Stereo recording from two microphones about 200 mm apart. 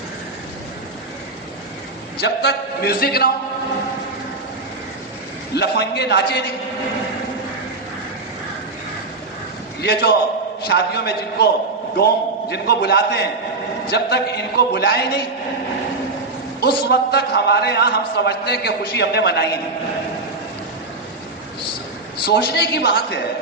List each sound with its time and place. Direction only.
2.2 s music: 55° left (ahead or behind)
5.5 s a man's voice: 55° left (ahead or behind)
9.8 s a man's voice: 55° left (ahead or behind)
12.5 s a man's voice: 55° left (ahead or behind)
16.6 s a man's voice: 55° left (ahead or behind)
22.3 s a man's voice: 55° left (ahead or behind)